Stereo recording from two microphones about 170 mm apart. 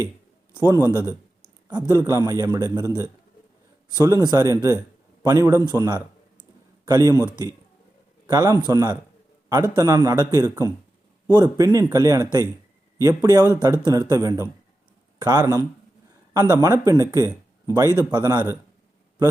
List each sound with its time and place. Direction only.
0.5 s a man's voice: 25° right (ahead or behind)
4.0 s a man's voice: 20° right (ahead or behind)
8.3 s a man's voice: 20° right (ahead or behind)